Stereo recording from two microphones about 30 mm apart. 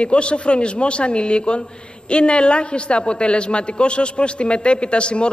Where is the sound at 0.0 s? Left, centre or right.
Left.